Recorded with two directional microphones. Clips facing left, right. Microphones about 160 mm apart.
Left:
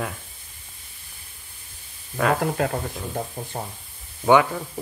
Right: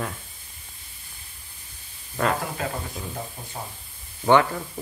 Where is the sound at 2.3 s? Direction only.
55° left (ahead or behind).